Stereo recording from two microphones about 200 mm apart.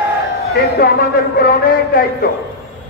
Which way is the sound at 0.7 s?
50° left (ahead or behind).